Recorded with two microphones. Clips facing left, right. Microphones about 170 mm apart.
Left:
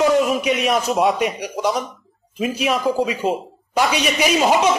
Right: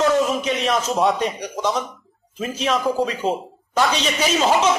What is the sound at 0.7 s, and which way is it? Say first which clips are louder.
A man's voice: left 2 dB; 10° left (ahead or behind).